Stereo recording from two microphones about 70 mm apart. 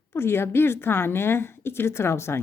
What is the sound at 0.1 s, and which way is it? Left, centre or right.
Speech, left.